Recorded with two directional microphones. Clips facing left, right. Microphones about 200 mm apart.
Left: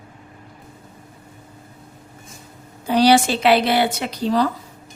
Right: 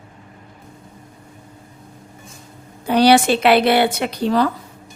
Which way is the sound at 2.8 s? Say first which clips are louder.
Right 2 dB; 60° right (ahead or behind).